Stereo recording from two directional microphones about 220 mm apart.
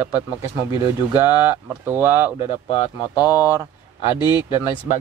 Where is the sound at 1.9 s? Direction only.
10° right (ahead or behind).